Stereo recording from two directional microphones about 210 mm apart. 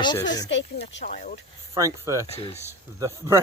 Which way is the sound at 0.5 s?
60° left (ahead or behind).